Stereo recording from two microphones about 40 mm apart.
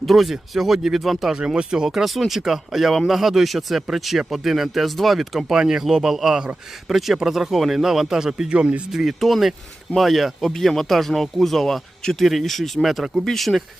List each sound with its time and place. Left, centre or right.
0.0 s speech: centre
1.5 s speech: centre
8.4 s speech: right
8.9 s speech: centre